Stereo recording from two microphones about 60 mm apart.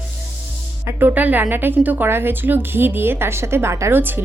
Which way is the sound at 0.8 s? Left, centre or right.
Right.